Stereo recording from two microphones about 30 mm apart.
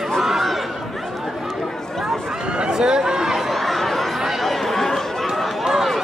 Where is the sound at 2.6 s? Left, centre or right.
Right.